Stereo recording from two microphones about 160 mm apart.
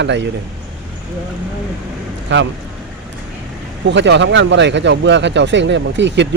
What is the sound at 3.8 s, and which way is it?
Speech, 90° right.